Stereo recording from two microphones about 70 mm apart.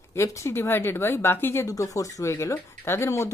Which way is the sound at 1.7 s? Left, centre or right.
Left.